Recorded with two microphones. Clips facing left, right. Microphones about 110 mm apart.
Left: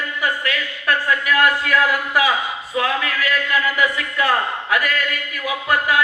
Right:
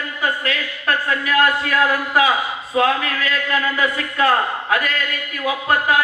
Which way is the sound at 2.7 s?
30° right (ahead or behind).